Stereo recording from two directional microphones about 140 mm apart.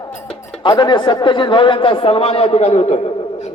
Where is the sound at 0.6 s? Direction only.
35° left (ahead or behind).